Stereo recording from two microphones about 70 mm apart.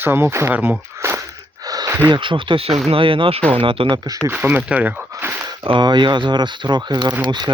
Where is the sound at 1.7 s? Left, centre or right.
Right.